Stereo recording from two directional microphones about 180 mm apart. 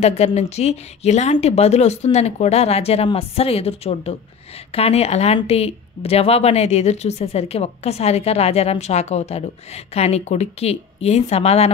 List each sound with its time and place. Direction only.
0.0 s speech: 35° left (ahead or behind)